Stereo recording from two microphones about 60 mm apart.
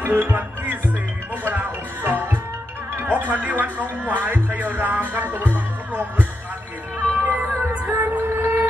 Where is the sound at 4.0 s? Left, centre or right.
Right.